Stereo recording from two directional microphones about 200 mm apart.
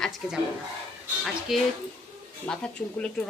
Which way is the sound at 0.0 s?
Centre (ahead or behind).